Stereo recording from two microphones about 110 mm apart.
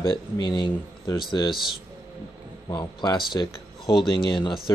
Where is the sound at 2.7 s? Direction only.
40° left (ahead or behind).